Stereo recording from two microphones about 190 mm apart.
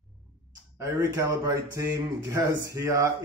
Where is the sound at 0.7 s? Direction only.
15° right (ahead or behind).